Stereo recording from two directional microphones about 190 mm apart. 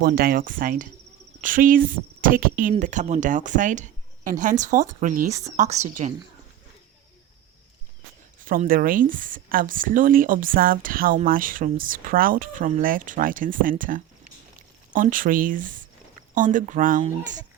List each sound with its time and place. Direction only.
0.0 s speech: 50° right (ahead or behind)
8.4 s speech: 50° right (ahead or behind)